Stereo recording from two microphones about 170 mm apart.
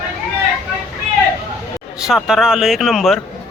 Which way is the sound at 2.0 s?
5° right (ahead or behind).